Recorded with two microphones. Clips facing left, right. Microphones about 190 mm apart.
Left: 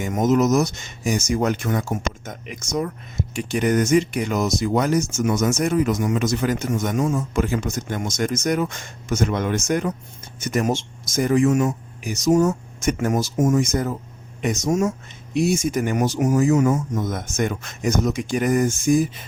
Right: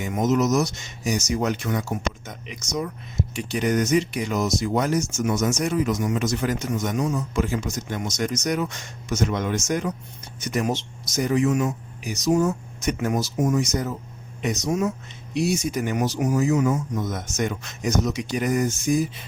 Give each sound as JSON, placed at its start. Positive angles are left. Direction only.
{"t": 0.0, "sound": "speech", "side_deg": 50}
{"t": 6.7, "sound": "speech", "side_deg": 50}
{"t": 10.4, "sound": "speech", "side_deg": 50}